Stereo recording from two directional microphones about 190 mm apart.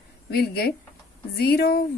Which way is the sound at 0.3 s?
55° left (ahead or behind).